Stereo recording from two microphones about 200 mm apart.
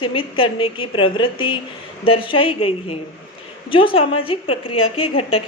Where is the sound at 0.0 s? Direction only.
25° left (ahead or behind).